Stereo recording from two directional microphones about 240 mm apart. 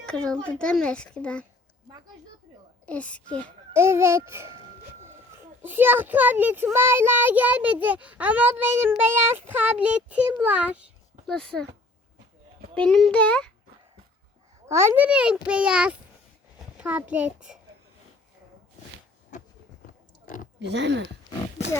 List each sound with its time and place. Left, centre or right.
0.0 s speech: centre
2.8 s speech: centre
3.7 s a child's voice: centre
5.6 s a child's voice: centre
12.7 s speech: centre
14.7 s a child's voice: centre
20.6 s speech: right